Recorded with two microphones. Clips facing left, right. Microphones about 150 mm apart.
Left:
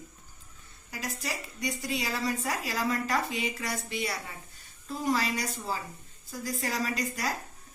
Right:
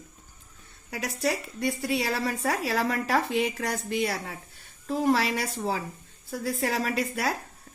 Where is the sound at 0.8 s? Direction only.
65° right (ahead or behind).